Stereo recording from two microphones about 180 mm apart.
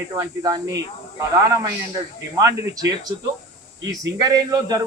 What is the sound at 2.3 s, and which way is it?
Speech, 15° right (ahead or behind).